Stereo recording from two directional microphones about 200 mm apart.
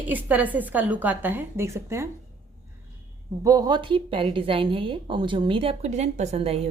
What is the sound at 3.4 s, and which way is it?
A woman's voice, 20° right (ahead or behind).